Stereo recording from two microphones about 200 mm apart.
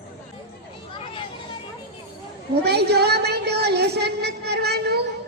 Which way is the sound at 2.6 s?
55° right (ahead or behind).